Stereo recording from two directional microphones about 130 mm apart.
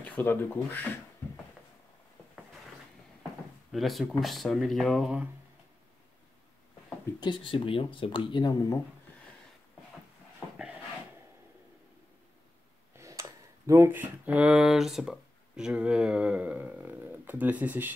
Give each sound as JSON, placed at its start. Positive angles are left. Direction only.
{"t": 0.0, "sound": "speech", "side_deg": 15}
{"t": 3.7, "sound": "speech", "side_deg": 0}
{"t": 7.2, "sound": "speech", "side_deg": 40}
{"t": 12.9, "sound": "speech", "side_deg": -25}